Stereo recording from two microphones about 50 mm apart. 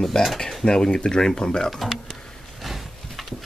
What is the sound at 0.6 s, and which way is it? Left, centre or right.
Speech, centre.